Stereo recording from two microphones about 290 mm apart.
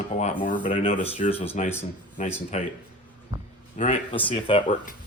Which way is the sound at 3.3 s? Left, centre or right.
Centre.